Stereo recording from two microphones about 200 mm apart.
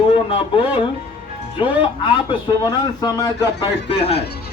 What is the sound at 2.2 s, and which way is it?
A man's voice, 20° left (ahead or behind).